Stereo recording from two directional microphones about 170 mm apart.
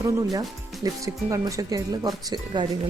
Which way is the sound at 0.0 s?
20° right (ahead or behind).